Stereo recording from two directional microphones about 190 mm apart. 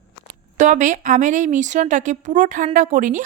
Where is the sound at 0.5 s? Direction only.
40° right (ahead or behind).